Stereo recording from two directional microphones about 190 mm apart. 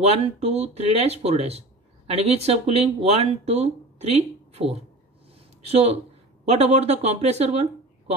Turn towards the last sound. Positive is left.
turn(degrees=-35)  # may be behind; listen again after turning